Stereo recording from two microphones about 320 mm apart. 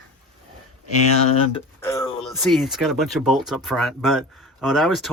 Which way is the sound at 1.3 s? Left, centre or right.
Centre.